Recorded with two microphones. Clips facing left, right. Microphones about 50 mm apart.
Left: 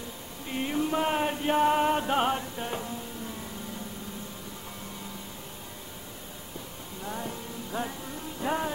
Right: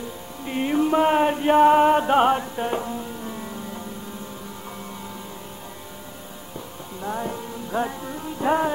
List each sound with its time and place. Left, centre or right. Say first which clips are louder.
0.5 s chant: right 8 dB; right
7.0 s music: right 8 dB; right